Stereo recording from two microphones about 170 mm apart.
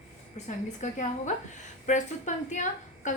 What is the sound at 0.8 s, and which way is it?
Speech, 45° left (ahead or behind).